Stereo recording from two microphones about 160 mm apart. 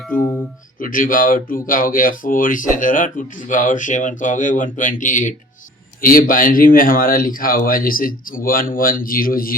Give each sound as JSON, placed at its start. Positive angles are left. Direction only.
{"t": 0.1, "sound": "speech", "side_deg": 60}